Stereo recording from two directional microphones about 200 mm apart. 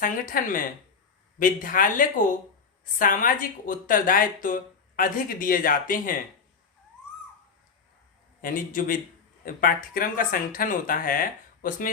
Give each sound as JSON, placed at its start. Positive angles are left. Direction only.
{"t": 0.0, "sound": "speech", "side_deg": 45}
{"t": 8.4, "sound": "speech", "side_deg": 45}